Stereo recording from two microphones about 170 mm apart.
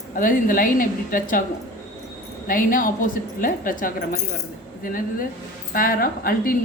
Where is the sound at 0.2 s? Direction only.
55° left (ahead or behind).